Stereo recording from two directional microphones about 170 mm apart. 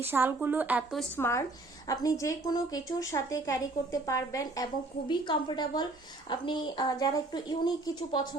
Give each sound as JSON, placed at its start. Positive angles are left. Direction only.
{"t": 0.0, "sound": "a woman's voice", "side_deg": -10}
{"t": 1.1, "sound": "a woman's voice", "side_deg": 15}